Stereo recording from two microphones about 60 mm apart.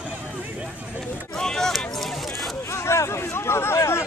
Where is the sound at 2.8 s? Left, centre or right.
Left.